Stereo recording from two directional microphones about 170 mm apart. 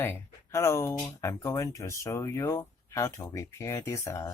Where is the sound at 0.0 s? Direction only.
15° left (ahead or behind).